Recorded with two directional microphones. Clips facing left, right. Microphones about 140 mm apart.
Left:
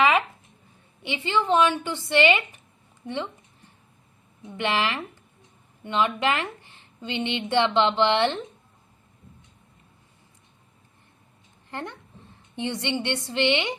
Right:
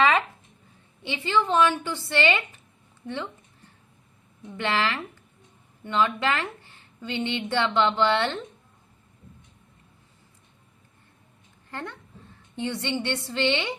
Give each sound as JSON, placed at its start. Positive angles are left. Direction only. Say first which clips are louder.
{"t": 1.0, "sound": "a woman's voice", "louder": "even", "side_deg": 20}
{"t": 4.4, "sound": "a woman's voice", "louder": "left 1 dB", "side_deg": 15}
{"t": 11.7, "sound": "a woman's voice", "louder": "left 1 dB", "side_deg": 20}